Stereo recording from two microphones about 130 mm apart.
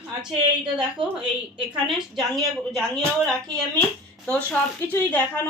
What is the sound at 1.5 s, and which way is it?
A woman's voice, 5° right (ahead or behind).